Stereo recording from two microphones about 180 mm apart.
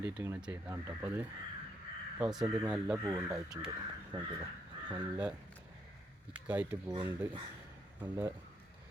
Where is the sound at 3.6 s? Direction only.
20° right (ahead or behind).